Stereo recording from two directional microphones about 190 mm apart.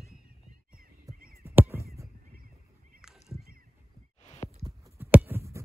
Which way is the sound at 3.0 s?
Centre (ahead or behind).